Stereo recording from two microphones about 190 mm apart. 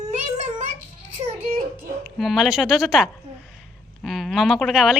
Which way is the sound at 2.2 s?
Centre (ahead or behind).